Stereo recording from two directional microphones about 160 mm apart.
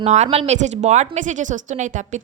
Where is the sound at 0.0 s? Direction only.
45° right (ahead or behind).